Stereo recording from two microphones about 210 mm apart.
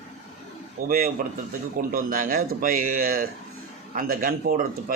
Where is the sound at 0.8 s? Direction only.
45° right (ahead or behind).